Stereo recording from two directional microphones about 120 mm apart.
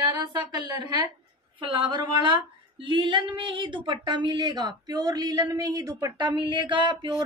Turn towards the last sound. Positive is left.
turn(degrees=-40)  # may be behind; listen again after turning